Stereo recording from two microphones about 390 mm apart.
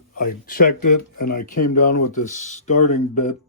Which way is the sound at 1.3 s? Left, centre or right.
Left.